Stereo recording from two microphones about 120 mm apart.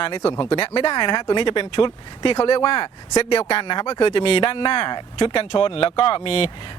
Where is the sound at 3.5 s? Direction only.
45° left (ahead or behind).